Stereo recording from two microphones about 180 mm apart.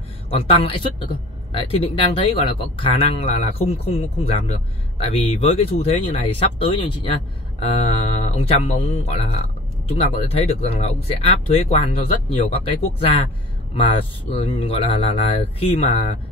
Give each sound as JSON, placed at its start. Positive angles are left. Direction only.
{"t": 0.3, "sound": "speech", "side_deg": 30}